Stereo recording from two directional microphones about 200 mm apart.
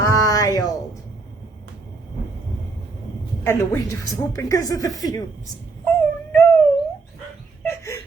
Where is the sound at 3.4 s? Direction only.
15° left (ahead or behind).